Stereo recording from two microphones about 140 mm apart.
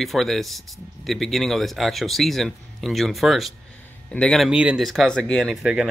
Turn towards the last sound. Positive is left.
turn(degrees=0)  # may be behind; listen again after turning